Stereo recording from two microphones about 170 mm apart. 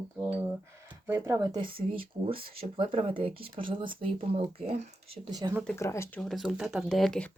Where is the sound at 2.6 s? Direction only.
30° right (ahead or behind).